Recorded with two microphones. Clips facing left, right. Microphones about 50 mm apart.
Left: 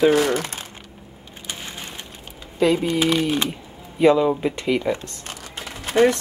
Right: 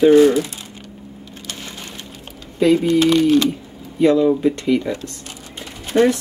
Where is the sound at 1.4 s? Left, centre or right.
Centre.